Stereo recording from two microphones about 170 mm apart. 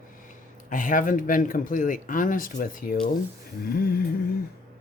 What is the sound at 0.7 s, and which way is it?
Speech, 50° left (ahead or behind).